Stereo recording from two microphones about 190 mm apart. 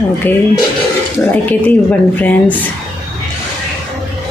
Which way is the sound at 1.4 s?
10° left (ahead or behind).